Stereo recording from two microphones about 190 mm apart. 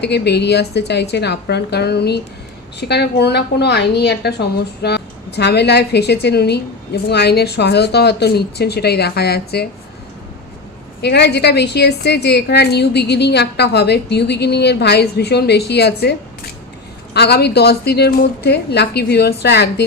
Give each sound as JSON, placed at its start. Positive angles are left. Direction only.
{"t": 0.0, "sound": "a woman's voice", "side_deg": 60}
{"t": 11.0, "sound": "a woman's voice", "side_deg": 60}
{"t": 17.2, "sound": "a woman's voice", "side_deg": 60}